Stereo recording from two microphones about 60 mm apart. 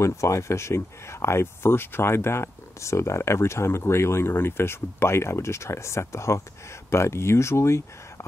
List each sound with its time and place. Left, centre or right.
0.0 s speech: left